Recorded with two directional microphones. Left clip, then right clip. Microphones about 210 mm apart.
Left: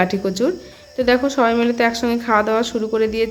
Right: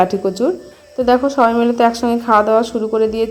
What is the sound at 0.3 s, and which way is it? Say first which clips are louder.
A woman's voice: right 3 dB; 5° left (ahead or behind).